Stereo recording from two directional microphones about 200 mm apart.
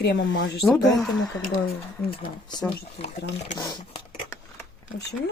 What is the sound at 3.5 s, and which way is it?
Speech, 20° left (ahead or behind).